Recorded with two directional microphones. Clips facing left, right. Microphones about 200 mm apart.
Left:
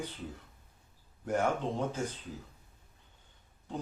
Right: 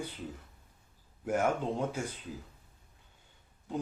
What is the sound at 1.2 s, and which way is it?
Speech, 5° right (ahead or behind).